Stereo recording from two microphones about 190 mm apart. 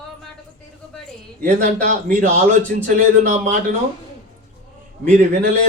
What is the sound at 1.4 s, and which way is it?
A man's voice, 40° right (ahead or behind).